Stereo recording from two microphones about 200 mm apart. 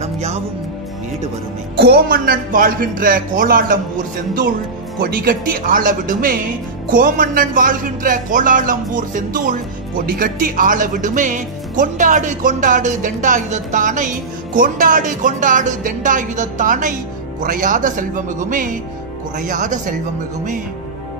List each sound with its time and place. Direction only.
0.0 s music: 35° right (ahead or behind)
1.8 s a man's voice: 50° right (ahead or behind)
5.0 s a man's voice: 45° right (ahead or behind)